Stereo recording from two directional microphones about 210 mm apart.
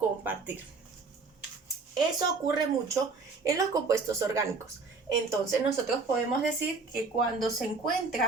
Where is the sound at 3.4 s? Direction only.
15° right (ahead or behind).